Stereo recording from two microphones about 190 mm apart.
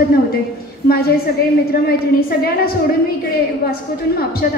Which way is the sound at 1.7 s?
55° left (ahead or behind).